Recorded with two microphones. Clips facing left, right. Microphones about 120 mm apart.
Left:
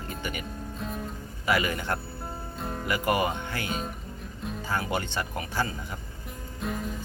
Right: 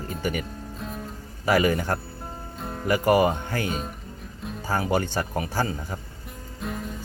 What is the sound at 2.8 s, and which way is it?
Speech, 35° right (ahead or behind).